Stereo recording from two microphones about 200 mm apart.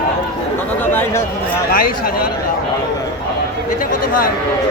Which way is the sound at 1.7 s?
45° left (ahead or behind).